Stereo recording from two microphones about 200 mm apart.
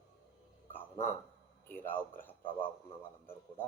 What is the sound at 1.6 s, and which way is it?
A man's voice, 10° left (ahead or behind).